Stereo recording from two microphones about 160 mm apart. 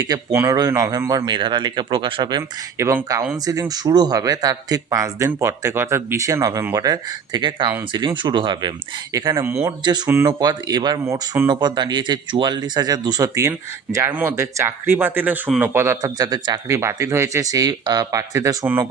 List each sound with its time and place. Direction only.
0.4 s speech: 20° right (ahead or behind)
2.7 s speech: 15° right (ahead or behind)